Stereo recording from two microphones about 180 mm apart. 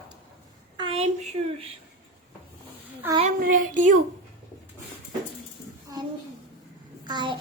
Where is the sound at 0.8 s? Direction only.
30° right (ahead or behind).